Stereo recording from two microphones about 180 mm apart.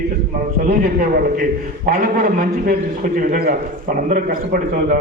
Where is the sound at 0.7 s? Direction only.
55° right (ahead or behind).